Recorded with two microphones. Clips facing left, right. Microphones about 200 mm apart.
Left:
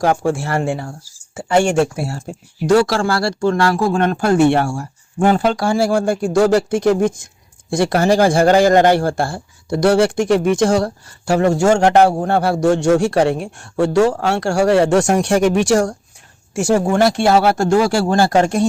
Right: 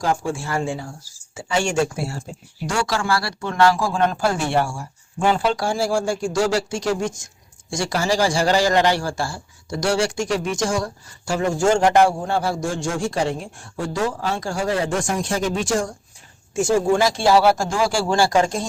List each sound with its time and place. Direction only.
0.0 s a man's voice: 65° left (ahead or behind)
3.8 s a man's voice: 60° left (ahead or behind)
5.2 s a man's voice: 50° left (ahead or behind)